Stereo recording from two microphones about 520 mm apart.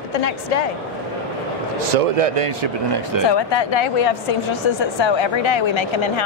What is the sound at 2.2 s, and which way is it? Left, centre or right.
Speech, right.